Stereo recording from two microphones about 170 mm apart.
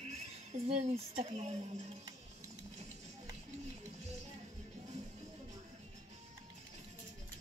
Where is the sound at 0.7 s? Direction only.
40° right (ahead or behind).